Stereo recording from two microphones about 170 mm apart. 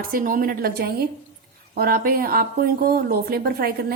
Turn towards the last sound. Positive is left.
turn(degrees=-65)  # may be behind; listen again after turning